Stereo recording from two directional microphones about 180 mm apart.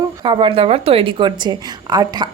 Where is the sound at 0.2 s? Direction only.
30° right (ahead or behind).